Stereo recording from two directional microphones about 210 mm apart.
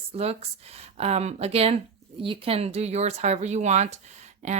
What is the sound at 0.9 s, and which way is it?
A woman's voice, 30° right (ahead or behind).